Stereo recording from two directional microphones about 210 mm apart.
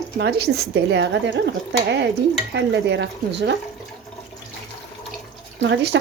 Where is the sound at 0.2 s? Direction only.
50° right (ahead or behind).